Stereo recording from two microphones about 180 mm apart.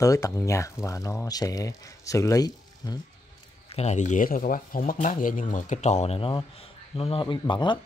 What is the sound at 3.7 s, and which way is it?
Speech, 35° left (ahead or behind).